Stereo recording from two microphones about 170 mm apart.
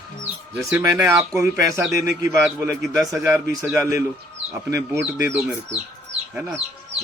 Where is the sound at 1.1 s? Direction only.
20° right (ahead or behind).